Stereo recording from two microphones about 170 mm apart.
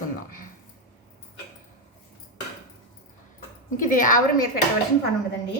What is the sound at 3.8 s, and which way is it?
Speech, 50° left (ahead or behind).